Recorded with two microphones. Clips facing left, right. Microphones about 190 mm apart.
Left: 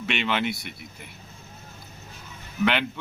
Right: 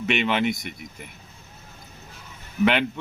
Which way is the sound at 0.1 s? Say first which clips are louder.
Right 4 dB; 5° right (ahead or behind).